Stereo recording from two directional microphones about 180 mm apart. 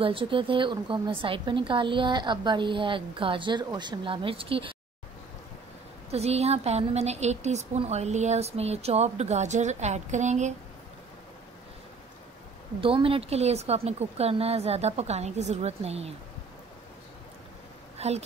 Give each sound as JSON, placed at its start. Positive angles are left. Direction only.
{"t": 0.0, "sound": "a woman's voice", "side_deg": -30}
{"t": 6.1, "sound": "a woman's voice", "side_deg": -35}
{"t": 12.8, "sound": "a woman's voice", "side_deg": -30}
{"t": 17.9, "sound": "a sound", "side_deg": -35}